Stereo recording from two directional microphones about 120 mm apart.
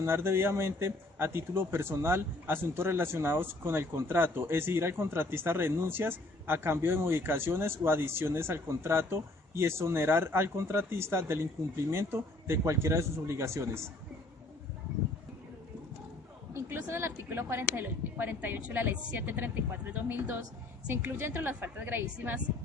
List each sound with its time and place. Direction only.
0.0 s a man's voice: 20° right (ahead or behind)
16.6 s a woman's voice: 20° right (ahead or behind)